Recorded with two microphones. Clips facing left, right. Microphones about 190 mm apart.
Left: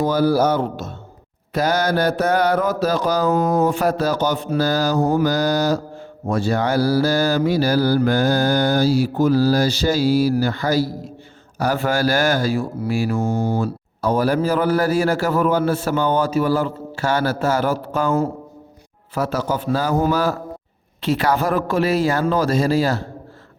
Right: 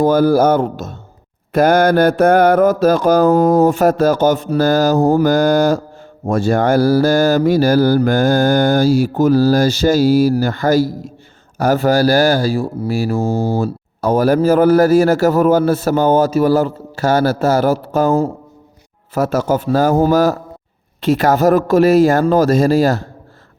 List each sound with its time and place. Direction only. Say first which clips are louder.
0.0 s mantra: right 5 dB; 50° right (ahead or behind)
11.5 s a man's voice: right 7 dB; 45° right (ahead or behind)
14.0 s a man's voice: right 5 dB; 45° right (ahead or behind)
19.1 s mantra: right 6 dB; 45° right (ahead or behind)